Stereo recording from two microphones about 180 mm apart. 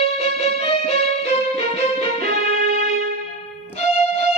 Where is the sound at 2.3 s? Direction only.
55° right (ahead or behind).